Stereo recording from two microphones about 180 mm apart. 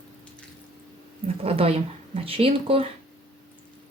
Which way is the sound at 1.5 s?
30° right (ahead or behind).